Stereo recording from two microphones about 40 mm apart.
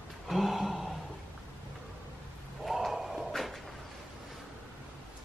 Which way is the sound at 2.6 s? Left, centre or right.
Centre.